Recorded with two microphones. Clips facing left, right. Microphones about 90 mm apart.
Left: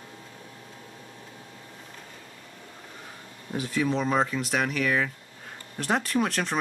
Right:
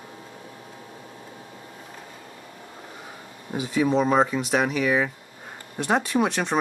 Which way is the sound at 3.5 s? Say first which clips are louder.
Right 4 dB; 5° right (ahead or behind).